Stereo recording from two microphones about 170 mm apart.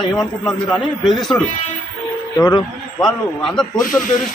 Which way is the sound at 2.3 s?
25° left (ahead or behind).